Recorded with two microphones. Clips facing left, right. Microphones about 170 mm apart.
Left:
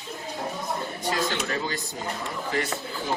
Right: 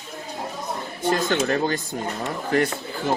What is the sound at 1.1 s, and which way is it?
Speech, 50° right (ahead or behind).